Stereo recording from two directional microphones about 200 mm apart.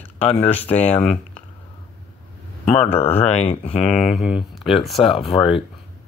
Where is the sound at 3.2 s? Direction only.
30° left (ahead or behind).